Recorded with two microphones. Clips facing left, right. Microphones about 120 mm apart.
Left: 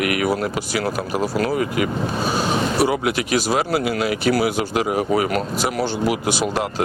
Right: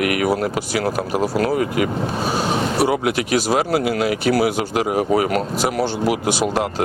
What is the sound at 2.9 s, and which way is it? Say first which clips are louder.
Speech: right 1 dB; 55° right (ahead or behind).